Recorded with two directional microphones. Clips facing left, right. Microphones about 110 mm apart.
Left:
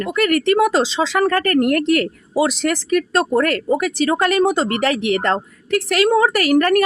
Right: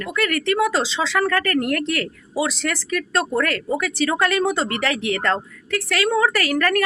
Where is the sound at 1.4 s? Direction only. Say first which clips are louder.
Left 5 dB; 45° left (ahead or behind).